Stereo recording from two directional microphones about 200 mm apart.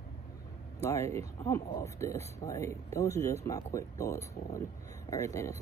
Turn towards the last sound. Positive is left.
turn(degrees=15)  # may be behind; listen again after turning